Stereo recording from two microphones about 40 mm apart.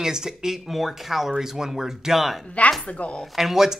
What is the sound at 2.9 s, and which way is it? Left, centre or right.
Speech, left.